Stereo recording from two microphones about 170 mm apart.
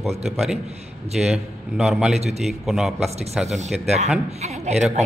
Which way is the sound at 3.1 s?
40° right (ahead or behind).